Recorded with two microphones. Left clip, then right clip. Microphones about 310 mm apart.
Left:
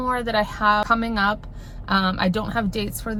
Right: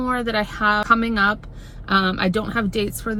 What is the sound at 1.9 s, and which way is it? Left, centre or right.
Speech, left.